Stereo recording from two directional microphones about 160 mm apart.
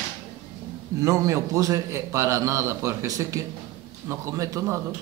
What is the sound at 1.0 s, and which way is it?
A man's voice, 20° right (ahead or behind).